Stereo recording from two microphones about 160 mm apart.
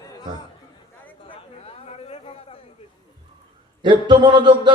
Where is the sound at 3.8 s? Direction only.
30° right (ahead or behind).